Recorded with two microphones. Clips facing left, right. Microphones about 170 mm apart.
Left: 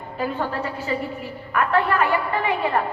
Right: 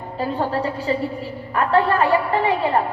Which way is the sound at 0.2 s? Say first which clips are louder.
Right 3 dB; 35° right (ahead or behind).